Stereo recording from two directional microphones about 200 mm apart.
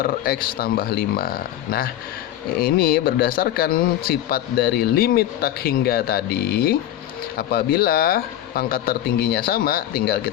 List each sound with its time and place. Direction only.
0.0 s a man's voice: 45° left (ahead or behind)